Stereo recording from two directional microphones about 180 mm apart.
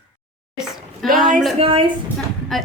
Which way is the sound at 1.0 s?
Centre (ahead or behind).